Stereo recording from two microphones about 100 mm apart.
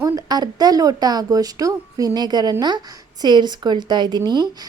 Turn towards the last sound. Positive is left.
turn(degrees=-45)  # may be behind; listen again after turning